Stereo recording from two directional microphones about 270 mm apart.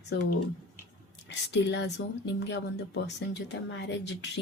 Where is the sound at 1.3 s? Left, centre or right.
Left.